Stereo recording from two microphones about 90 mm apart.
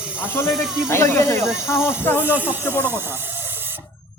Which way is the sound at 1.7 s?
30° left (ahead or behind).